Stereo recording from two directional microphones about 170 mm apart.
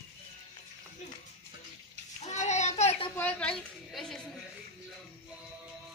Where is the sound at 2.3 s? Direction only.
45° left (ahead or behind).